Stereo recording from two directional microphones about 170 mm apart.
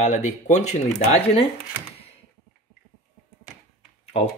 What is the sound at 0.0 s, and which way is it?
Speech, 45° left (ahead or behind).